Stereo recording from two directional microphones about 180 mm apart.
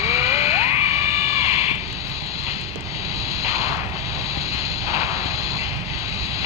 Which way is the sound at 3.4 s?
15° right (ahead or behind).